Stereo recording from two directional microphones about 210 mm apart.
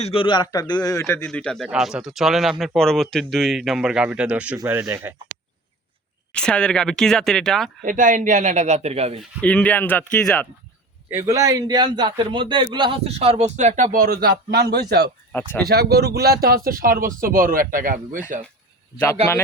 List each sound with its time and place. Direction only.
0.0 s speech: 25° left (ahead or behind); by 5.1 s 10° right (ahead or behind)
6.3 s speech: 5° left (ahead or behind)
7.8 s a man's voice: 40° right (ahead or behind)
9.4 s speech: 5° left (ahead or behind)
11.1 s a man's voice: 15° right (ahead or behind); by 15.1 s 50° right (ahead or behind)
15.3 s speech: 10° left (ahead or behind)
15.7 s a man's voice: 50° right (ahead or behind)